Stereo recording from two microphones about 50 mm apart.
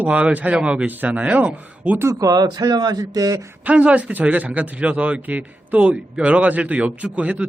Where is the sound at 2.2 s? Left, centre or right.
Right.